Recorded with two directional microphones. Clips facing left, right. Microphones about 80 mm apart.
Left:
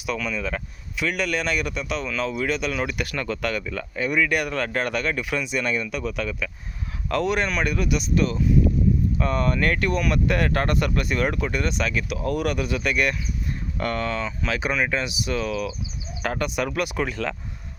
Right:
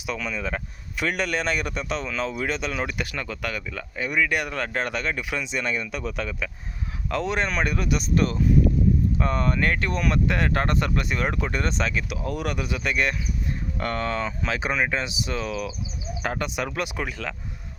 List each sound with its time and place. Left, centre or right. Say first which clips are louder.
0.0 s speech: left 2 dB; right
0.9 s a man's voice: left 1 dB; right
9.1 s speech: left 1 dB; right
9.9 s a man's voice: left 2 dB; right
10.2 s speech: left 1 dB; right
17.0 s speech: left 4 dB; centre